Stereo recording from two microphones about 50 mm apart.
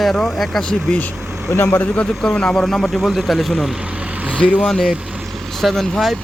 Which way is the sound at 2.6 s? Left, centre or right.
Centre.